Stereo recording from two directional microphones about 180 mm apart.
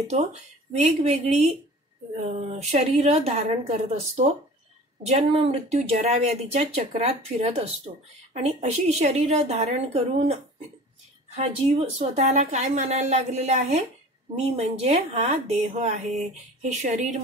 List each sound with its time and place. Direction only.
0.0 s speech: 40° right (ahead or behind)
5.0 s speech: 35° right (ahead or behind)